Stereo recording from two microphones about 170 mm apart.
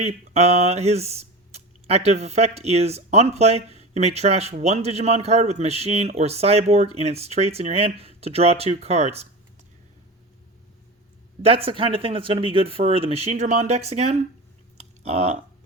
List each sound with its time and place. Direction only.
0.0 s speech: 40° right (ahead or behind)
11.4 s speech: 35° right (ahead or behind)
14.8 s a sound: 40° right (ahead or behind)